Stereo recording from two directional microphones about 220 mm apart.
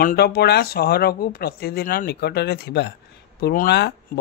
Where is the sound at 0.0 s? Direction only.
45° left (ahead or behind).